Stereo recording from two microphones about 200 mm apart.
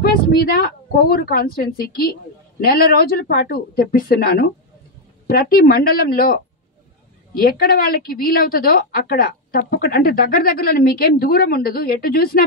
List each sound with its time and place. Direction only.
0.0 s a woman's voice: 50° left (ahead or behind)